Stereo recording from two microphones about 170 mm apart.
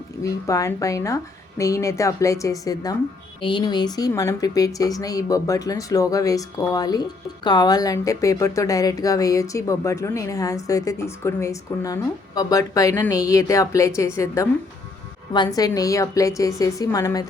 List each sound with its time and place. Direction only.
0.2 s speech: 20° left (ahead or behind)